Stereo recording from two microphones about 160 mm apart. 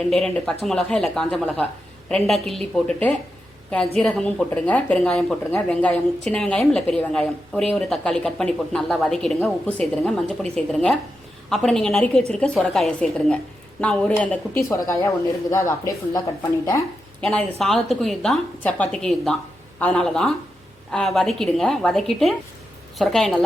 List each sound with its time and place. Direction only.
0.0 s a woman's voice: 5° left (ahead or behind)
17.2 s a woman's voice: 5° left (ahead or behind)